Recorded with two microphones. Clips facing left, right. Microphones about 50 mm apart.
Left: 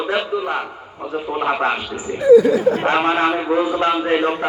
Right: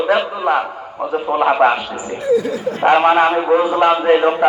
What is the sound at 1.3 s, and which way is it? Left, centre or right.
Speech, centre.